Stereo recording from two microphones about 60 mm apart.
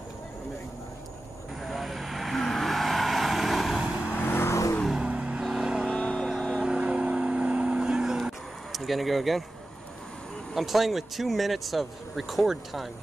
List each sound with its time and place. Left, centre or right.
1.6 s vehicle: centre
4.1 s vehicle: left
5.0 s vehicle: right
6.1 s music: centre
6.6 s vehicle: centre
10.5 s speech: centre